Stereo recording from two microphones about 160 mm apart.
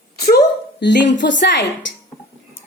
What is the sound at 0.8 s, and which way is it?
Speech, 90° left.